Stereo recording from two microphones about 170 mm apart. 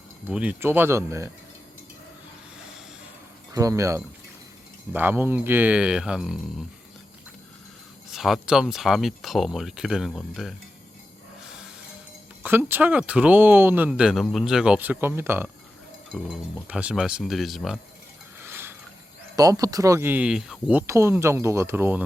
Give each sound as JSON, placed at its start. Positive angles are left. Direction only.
{"t": 0.3, "sound": "speech", "side_deg": -10}
{"t": 3.5, "sound": "speech", "side_deg": -20}
{"t": 8.1, "sound": "speech", "side_deg": 0}
{"t": 12.4, "sound": "speech", "side_deg": -10}
{"t": 18.3, "sound": "pulleys", "side_deg": -10}
{"t": 19.4, "sound": "speech", "side_deg": -20}